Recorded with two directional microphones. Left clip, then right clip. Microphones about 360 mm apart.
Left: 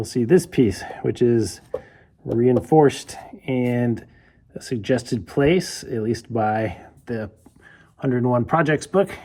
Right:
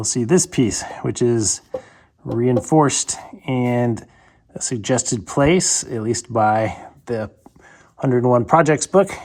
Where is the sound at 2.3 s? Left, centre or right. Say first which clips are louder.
Even; centre.